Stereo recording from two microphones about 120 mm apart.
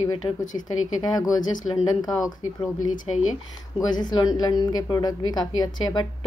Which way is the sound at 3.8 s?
35° left (ahead or behind).